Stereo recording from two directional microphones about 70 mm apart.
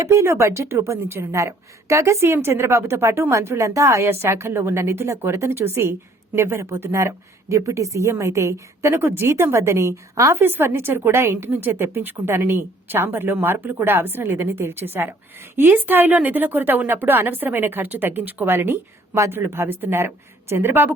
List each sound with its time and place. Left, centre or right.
0.0 s a woman's voice: right
10.3 s a woman's voice: right